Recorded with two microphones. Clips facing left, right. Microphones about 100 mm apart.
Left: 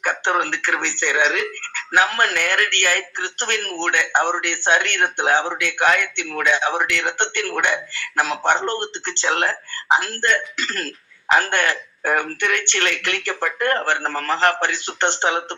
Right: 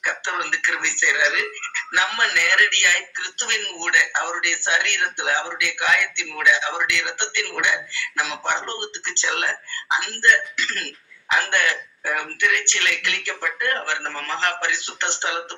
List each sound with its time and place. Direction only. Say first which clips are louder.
0.0 s speech: left 6 dB; 50° left (ahead or behind)